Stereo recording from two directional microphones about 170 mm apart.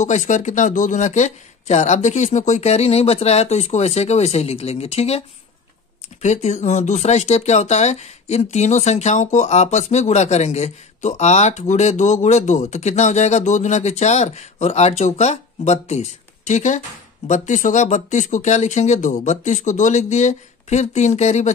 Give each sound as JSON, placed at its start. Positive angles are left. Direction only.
{"t": 0.0, "sound": "speech", "side_deg": 45}
{"t": 6.2, "sound": "speech", "side_deg": 40}